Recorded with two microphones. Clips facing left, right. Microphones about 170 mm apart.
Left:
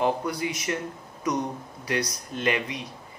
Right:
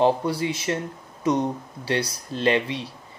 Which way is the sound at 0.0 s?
30° right (ahead or behind).